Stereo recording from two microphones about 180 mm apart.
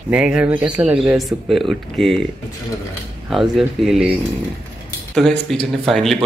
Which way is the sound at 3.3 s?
Centre (ahead or behind).